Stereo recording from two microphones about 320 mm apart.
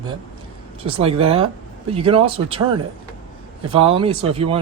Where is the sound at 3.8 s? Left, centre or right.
Centre.